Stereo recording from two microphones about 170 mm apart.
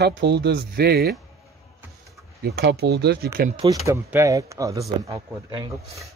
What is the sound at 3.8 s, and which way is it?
Speech, 15° right (ahead or behind).